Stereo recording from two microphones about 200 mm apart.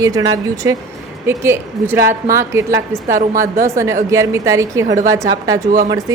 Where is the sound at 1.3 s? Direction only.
10° right (ahead or behind).